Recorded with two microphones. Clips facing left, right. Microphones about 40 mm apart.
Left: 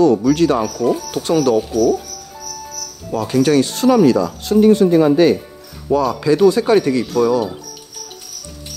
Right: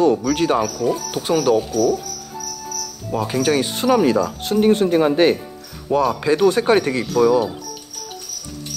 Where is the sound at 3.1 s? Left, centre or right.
Centre.